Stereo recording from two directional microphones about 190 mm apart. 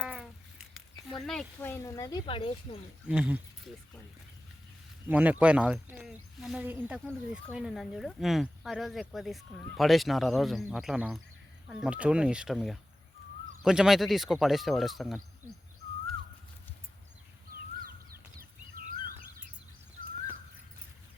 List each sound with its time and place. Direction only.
0.0 s a sound: 5° right (ahead or behind)
1.2 s speech: 5° left (ahead or behind); by 2.8 s 30° left (ahead or behind)
3.1 s speech: 5° right (ahead or behind)
5.0 s speech: 10° right (ahead or behind)
17.5 s bird: 50° right (ahead or behind)